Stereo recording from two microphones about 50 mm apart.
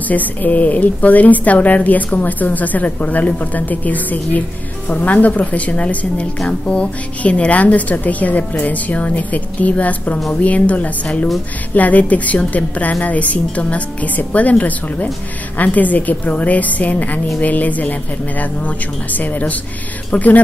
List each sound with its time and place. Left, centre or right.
0.1 s a woman's voice: left